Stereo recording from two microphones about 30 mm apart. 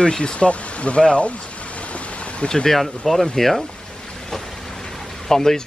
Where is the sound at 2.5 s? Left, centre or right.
Centre.